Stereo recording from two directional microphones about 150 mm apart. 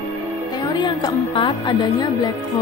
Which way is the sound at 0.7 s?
30° left (ahead or behind).